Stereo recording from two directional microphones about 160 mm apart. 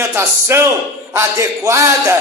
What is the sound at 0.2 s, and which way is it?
A man's voice, 15° right (ahead or behind).